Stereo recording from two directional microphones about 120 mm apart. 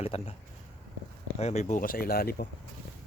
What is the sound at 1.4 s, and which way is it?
Speech, 65° left (ahead or behind).